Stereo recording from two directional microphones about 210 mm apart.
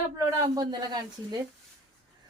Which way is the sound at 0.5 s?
20° right (ahead or behind).